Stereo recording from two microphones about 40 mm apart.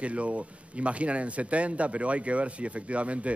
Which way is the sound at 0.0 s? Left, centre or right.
Right.